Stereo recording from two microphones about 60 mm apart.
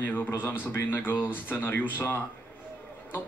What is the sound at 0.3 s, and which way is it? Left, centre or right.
Speech, left.